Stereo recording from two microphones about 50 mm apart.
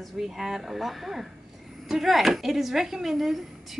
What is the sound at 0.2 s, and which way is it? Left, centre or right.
A woman's voice, centre.